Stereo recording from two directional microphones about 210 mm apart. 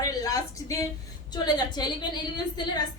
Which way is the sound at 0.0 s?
15° left (ahead or behind).